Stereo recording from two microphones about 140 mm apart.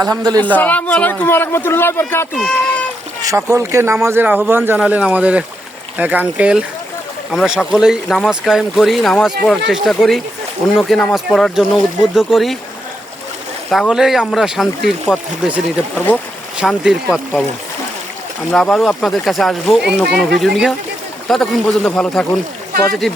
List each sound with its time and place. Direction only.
0.0 s speech: 25° right (ahead or behind)
0.3 s a man's voice: 10° left (ahead or behind)
2.3 s speech: 5° left (ahead or behind)
3.2 s speech: 20° right (ahead or behind); by 12.5 s centre (ahead or behind)
13.7 s speech: centre (ahead or behind)
18.5 s speech: 5° left (ahead or behind)